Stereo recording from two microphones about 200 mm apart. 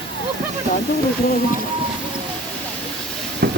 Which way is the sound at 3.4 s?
55° right (ahead or behind).